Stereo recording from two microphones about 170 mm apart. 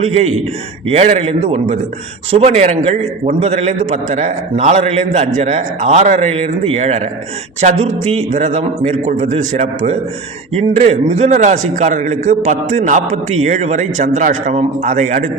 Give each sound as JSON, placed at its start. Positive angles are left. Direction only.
{"t": 0.0, "sound": "a man's voice", "side_deg": -40}